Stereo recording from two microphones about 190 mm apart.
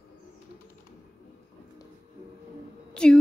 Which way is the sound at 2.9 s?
5° left (ahead or behind).